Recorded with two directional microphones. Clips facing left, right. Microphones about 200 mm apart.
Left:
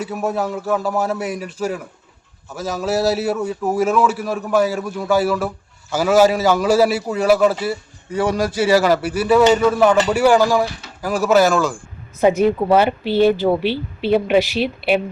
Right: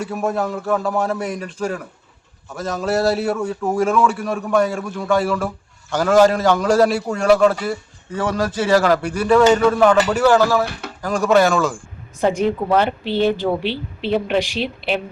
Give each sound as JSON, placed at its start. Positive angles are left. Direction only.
{"t": 0.0, "sound": "a man's voice", "side_deg": 0}
{"t": 10.7, "sound": "speech", "side_deg": -60}
{"t": 11.0, "sound": "a man's voice", "side_deg": 5}